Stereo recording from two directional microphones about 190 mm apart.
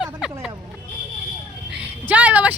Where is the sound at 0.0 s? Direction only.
5° right (ahead or behind).